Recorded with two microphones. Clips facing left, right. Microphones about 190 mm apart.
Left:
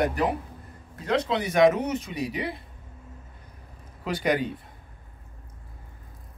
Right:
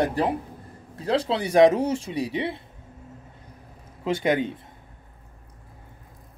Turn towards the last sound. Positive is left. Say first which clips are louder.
# right 2 dB
turn(degrees=-25)  # may be behind; listen again after turning